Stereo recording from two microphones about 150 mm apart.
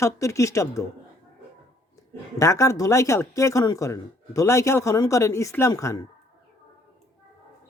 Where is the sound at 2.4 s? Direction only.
20° left (ahead or behind).